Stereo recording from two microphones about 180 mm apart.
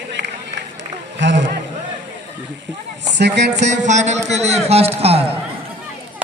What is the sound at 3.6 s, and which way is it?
A man's voice, 40° right (ahead or behind).